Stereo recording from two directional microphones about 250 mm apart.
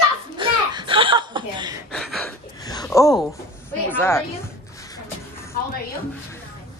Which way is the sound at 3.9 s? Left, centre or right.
Centre.